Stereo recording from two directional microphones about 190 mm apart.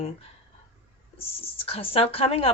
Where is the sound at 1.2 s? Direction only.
30° left (ahead or behind).